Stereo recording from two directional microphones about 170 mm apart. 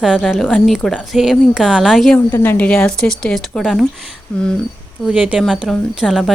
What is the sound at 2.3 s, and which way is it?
Speech, 10° left (ahead or behind).